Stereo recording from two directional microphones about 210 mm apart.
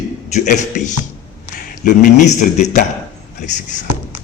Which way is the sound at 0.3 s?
35° left (ahead or behind).